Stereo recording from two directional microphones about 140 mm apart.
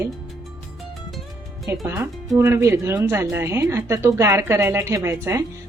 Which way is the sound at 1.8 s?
20° right (ahead or behind).